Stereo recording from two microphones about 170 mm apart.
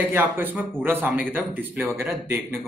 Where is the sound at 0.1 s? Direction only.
10° right (ahead or behind).